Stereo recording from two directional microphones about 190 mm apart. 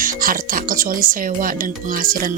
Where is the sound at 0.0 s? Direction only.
45° right (ahead or behind).